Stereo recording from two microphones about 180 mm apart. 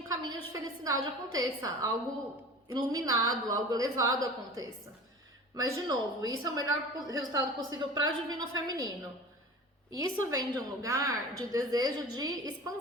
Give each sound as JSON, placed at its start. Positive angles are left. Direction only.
{"t": 0.1, "sound": "a woman's voice", "side_deg": -20}
{"t": 10.0, "sound": "a woman's voice", "side_deg": -20}